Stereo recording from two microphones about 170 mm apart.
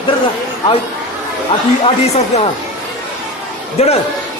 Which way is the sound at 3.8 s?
40° left (ahead or behind).